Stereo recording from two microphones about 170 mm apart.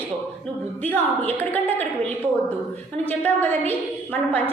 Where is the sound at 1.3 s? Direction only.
10° left (ahead or behind).